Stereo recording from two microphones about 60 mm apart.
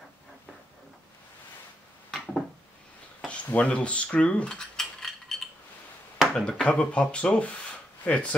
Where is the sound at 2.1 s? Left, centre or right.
Centre.